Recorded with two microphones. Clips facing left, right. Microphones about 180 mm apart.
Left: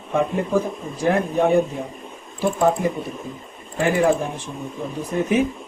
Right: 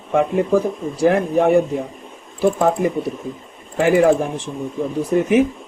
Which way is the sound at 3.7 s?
90° right.